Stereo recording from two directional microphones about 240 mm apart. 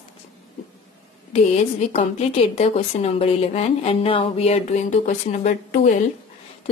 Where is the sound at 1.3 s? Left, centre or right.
Left.